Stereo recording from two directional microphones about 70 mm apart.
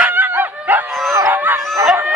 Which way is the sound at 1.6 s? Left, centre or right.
Right.